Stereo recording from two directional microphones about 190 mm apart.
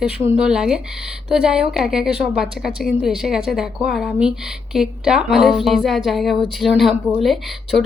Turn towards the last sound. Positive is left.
turn(degrees=0)  # may be behind; listen again after turning